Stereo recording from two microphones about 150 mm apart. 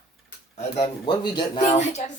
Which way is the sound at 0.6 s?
45° left (ahead or behind).